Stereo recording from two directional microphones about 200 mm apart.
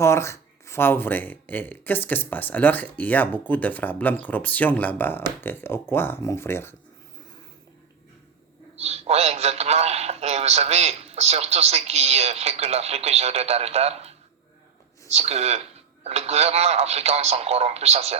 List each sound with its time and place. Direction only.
0.0 s speech: 15° left (ahead or behind)
8.8 s speech: 30° right (ahead or behind)